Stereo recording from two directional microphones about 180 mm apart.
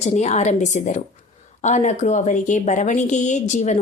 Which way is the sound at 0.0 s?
40° left (ahead or behind).